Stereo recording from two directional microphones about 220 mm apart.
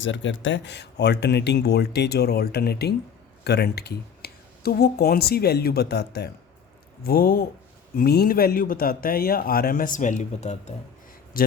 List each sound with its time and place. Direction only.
0.0 s a man's voice: 55° left (ahead or behind); by 11.5 s 40° left (ahead or behind)